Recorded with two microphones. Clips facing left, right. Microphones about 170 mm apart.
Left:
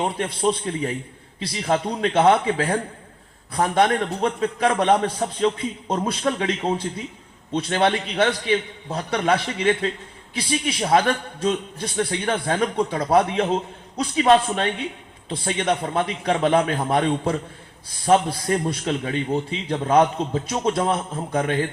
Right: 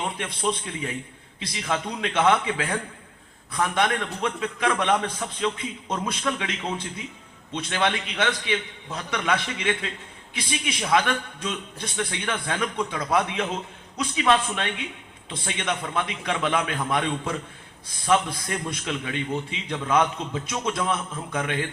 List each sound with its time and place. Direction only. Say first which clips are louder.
0.0 s a man's voice: left 6 dB; 40° left (ahead or behind)